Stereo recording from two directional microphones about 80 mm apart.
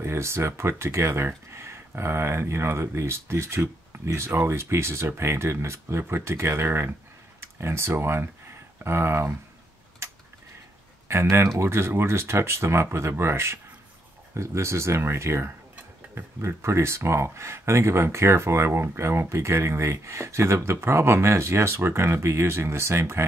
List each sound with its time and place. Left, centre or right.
0.0 s speech: right
11.1 s speech: right